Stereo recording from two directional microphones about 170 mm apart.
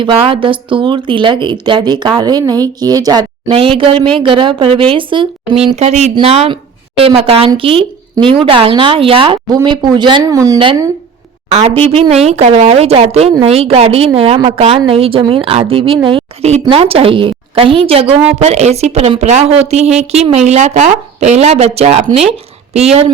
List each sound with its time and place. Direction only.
0.0 s a woman's voice: 30° right (ahead or behind)